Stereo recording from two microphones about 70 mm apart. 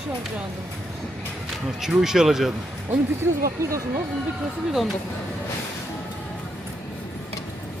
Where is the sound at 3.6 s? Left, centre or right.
Right.